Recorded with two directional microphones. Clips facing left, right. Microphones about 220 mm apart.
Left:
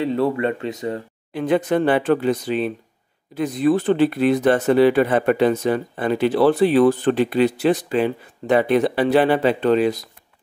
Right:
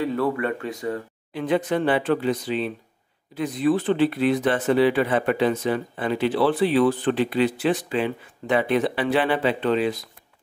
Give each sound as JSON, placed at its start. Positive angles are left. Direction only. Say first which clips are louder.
{"t": 0.0, "sound": "speech", "louder": "left 4 dB", "side_deg": 25}
{"t": 1.3, "sound": "speech", "louder": "left 4 dB", "side_deg": 45}